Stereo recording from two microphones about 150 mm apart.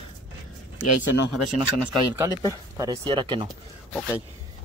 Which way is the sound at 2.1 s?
20° right (ahead or behind).